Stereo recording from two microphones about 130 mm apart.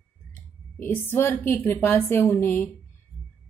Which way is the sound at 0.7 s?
15° left (ahead or behind).